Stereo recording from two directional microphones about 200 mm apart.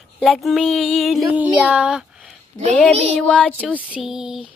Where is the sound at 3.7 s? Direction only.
5° right (ahead or behind).